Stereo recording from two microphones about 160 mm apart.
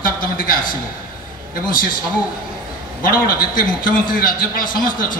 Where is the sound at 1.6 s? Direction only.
60° left (ahead or behind).